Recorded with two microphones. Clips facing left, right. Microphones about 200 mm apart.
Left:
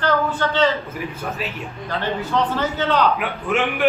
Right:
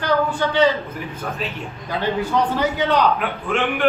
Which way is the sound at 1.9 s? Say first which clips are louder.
Right 2 dB; 15° right (ahead or behind).